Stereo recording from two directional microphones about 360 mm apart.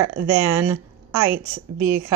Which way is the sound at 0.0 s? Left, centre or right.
Right.